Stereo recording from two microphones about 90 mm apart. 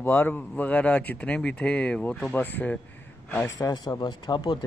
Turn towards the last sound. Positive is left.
turn(degrees=55)  # may be behind; listen again after turning